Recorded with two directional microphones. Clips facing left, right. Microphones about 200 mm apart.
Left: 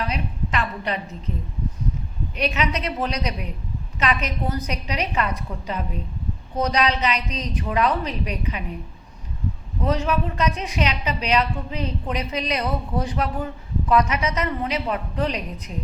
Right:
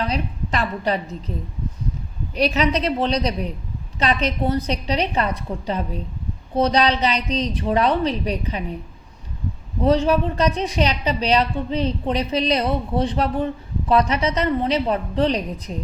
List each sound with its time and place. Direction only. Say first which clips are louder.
0.0 s a woman's voice: right 3 dB; 35° right (ahead or behind)
2.3 s a woman's voice: right 5 dB; 35° right (ahead or behind)
9.8 s a woman's voice: right 6 dB; 30° right (ahead or behind)